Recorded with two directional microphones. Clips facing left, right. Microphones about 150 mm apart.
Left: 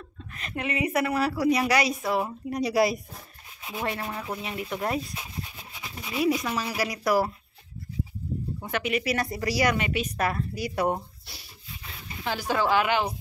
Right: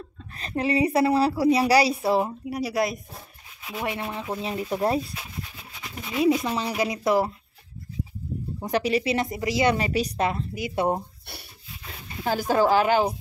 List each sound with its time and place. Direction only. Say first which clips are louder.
0.4 s a woman's voice: right 6 dB; 35° right (ahead or behind)
2.5 s speech: left 3 dB; centre (ahead or behind)
3.8 s a woman's voice: right 2 dB; 15° right (ahead or behind)
6.2 s speech: right 4 dB; 25° right (ahead or behind)
8.5 s speech: right 6 dB; 35° right (ahead or behind)
9.8 s a woman's voice: right 3 dB; 35° right (ahead or behind)
10.2 s speech: right 2 dB; 20° right (ahead or behind)
12.3 s a woman's voice: right 4 dB; 45° right (ahead or behind)